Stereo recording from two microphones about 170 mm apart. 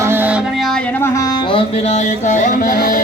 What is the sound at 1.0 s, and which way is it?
Music, 20° left (ahead or behind).